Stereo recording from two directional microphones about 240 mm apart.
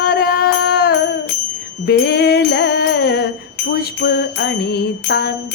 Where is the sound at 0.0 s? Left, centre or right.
Left.